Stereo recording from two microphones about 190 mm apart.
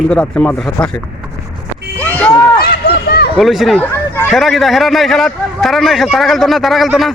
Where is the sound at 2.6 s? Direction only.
55° left (ahead or behind).